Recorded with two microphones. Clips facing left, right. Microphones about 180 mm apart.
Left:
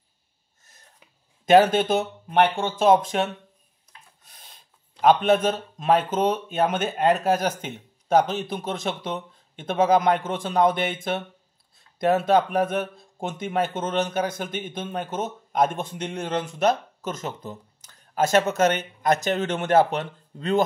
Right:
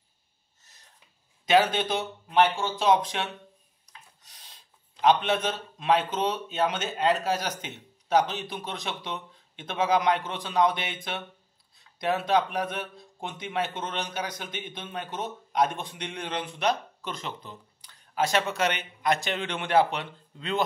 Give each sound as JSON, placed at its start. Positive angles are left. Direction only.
{"t": 1.4, "sound": "speech", "side_deg": 50}
{"t": 3.8, "sound": "rub", "side_deg": 55}
{"t": 5.0, "sound": "speech", "side_deg": 50}